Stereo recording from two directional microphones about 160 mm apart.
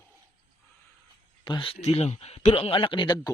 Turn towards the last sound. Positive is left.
turn(degrees=25)  # may be behind; listen again after turning